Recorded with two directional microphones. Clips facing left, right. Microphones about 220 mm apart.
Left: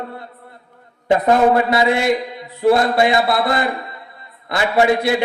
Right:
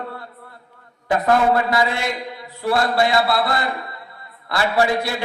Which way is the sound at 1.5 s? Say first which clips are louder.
Left 4 dB; 20° left (ahead or behind).